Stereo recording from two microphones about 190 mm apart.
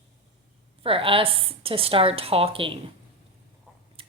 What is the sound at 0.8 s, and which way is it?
A woman's voice, 30° right (ahead or behind).